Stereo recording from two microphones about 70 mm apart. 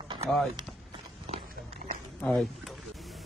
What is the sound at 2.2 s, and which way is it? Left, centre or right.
Speech, centre.